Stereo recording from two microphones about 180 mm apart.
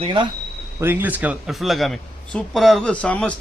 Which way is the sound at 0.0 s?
30° right (ahead or behind).